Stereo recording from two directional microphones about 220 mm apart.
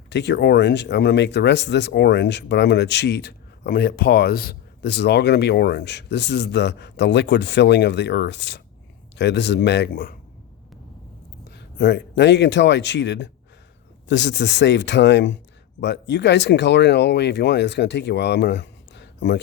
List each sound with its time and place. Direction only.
0.1 s speech: 50° left (ahead or behind)
11.5 s speech: 50° left (ahead or behind)